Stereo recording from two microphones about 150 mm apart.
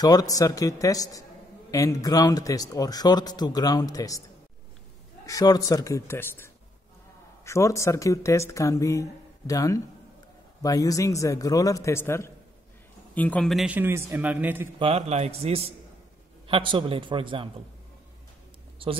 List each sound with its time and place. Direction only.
0.0 s speech: 25° left (ahead or behind)
5.2 s a man's voice: 25° left (ahead or behind); by 13.7 s centre (ahead or behind)
13.7 s a man's voice: 15° right (ahead or behind)
14.8 s a man's voice: 40° right (ahead or behind)